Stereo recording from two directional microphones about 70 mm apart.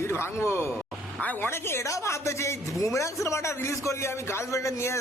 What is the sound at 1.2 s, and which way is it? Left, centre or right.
Speech, left.